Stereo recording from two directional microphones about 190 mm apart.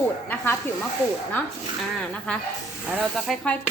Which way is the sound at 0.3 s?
10° left (ahead or behind).